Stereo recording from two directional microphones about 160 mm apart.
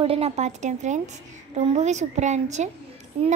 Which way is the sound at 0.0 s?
40° right (ahead or behind).